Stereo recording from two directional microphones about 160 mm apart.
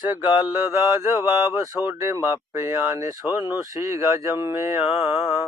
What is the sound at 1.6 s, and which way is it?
Speech, 15° right (ahead or behind).